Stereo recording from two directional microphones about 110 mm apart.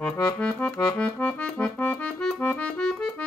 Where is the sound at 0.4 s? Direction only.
10° left (ahead or behind).